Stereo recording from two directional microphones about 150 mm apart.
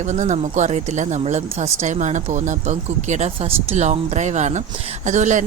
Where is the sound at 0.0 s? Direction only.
55° right (ahead or behind).